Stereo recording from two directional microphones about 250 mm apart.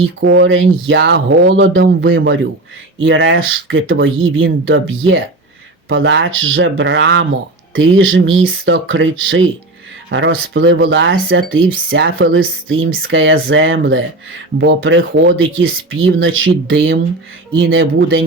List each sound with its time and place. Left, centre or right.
0.2 s speech: right